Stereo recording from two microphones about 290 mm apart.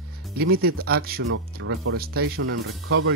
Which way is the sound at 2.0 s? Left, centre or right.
Right.